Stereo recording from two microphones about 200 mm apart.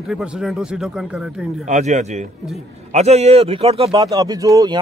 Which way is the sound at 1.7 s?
35° right (ahead or behind).